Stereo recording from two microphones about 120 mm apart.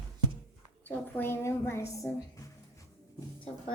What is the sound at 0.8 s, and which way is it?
A woman's voice, 15° left (ahead or behind).